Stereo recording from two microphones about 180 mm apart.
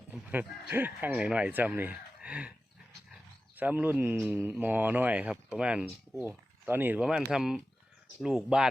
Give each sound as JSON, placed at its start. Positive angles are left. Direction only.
{"t": 0.1, "sound": "speech", "side_deg": -10}
{"t": 3.6, "sound": "speech", "side_deg": -10}